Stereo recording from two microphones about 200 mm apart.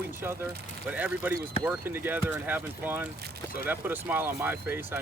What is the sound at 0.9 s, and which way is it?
Speech, 5° right (ahead or behind).